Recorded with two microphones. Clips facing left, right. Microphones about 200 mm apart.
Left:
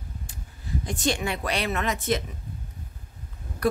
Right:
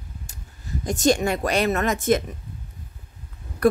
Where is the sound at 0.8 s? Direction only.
45° right (ahead or behind).